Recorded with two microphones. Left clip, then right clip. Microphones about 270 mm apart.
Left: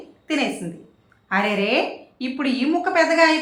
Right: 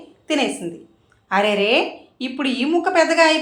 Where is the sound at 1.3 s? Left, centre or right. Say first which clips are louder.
Right 4 dB; centre.